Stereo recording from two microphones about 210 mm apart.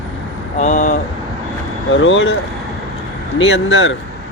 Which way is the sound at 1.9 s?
65° left (ahead or behind).